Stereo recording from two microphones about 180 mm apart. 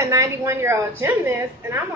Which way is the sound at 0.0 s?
15° right (ahead or behind).